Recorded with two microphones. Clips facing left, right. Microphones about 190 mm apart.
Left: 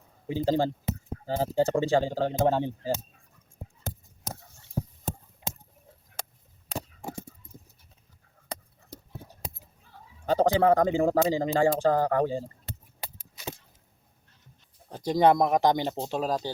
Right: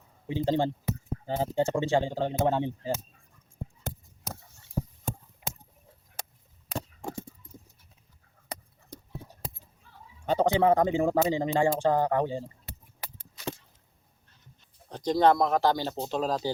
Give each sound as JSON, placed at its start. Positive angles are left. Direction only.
{"t": 0.3, "sound": "speech", "side_deg": 40}
{"t": 6.7, "sound": "chop", "side_deg": 5}
{"t": 10.2, "sound": "speech", "side_deg": 35}
{"t": 13.1, "sound": "a sound", "side_deg": 10}
{"t": 14.8, "sound": "speech", "side_deg": 5}